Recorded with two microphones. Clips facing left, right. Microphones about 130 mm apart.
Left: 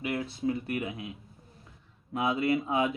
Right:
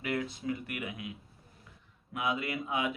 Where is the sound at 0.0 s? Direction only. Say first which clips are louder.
Left 1 dB; 20° left (ahead or behind).